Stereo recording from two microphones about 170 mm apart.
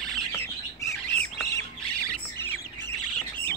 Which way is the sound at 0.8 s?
15° left (ahead or behind).